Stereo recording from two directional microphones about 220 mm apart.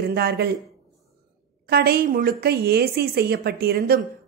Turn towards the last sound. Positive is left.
turn(degrees=-45)  # may be behind; listen again after turning